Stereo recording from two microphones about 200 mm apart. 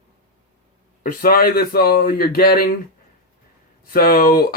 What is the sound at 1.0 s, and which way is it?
Speech, 45° left (ahead or behind).